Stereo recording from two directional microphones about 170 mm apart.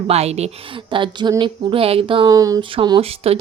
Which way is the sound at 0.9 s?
25° right (ahead or behind).